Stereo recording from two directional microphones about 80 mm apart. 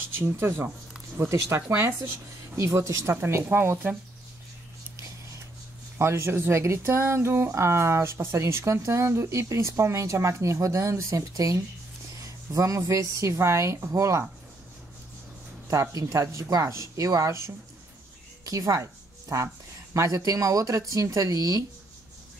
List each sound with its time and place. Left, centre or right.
0.1 s speech: right
5.9 s speech: right
15.7 s speech: right
18.4 s a woman's voice: right